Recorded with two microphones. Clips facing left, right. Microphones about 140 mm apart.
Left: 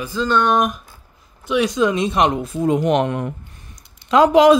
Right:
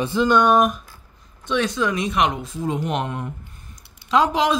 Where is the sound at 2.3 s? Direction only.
60° left (ahead or behind).